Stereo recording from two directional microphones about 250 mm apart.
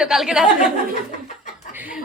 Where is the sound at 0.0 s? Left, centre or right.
Centre.